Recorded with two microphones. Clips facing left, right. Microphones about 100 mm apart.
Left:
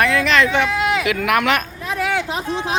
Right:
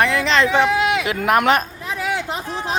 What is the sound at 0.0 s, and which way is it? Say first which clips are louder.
Speech: left 1 dB; 20° right (ahead or behind).